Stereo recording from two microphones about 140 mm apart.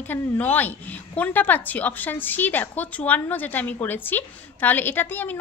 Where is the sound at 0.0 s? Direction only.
15° left (ahead or behind).